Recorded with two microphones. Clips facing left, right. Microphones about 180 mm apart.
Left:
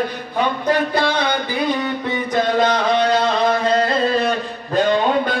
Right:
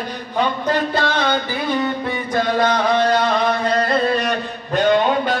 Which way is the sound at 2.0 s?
20° left (ahead or behind).